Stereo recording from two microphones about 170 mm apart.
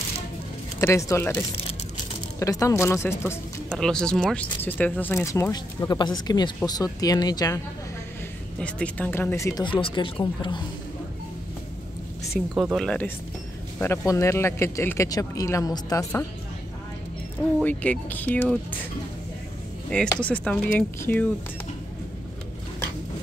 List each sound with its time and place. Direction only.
0.7 s speech: 15° left (ahead or behind)
3.7 s speech: 5° left (ahead or behind); by 7.6 s 20° left (ahead or behind)
8.5 s speech: 5° left (ahead or behind); by 10.6 s 30° left (ahead or behind)
12.6 s speech: centre (ahead or behind)
13.7 s speech: 15° left (ahead or behind)
17.6 s speech: 10° left (ahead or behind)
19.9 s speech: 5° left (ahead or behind)